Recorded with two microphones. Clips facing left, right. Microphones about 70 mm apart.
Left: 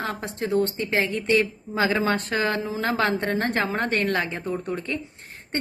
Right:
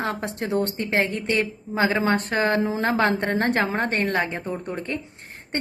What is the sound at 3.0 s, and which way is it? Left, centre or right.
Speech, right.